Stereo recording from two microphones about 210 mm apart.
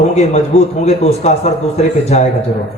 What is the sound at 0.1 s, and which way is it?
A man's voice, 30° left (ahead or behind).